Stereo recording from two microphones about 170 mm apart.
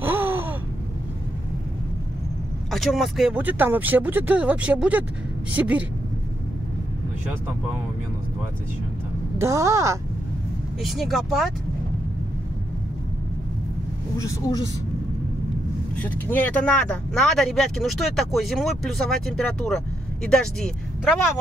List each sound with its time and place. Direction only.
0.0 s gasp: 10° right (ahead or behind)
2.7 s speech: centre (ahead or behind)
9.4 s speech: 20° right (ahead or behind)
10.8 s speech: centre (ahead or behind)
14.1 s speech: 20° left (ahead or behind)
16.0 s speech: 10° left (ahead or behind)